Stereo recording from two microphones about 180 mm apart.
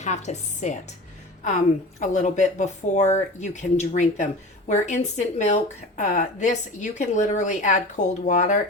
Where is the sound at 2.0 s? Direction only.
40° left (ahead or behind).